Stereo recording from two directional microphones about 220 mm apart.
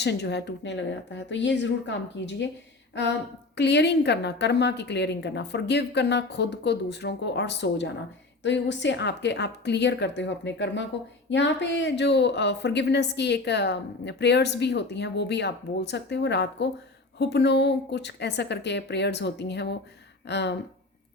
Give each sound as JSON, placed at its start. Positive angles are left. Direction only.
{"t": 0.0, "sound": "speech", "side_deg": 50}
{"t": 3.6, "sound": "speech", "side_deg": 50}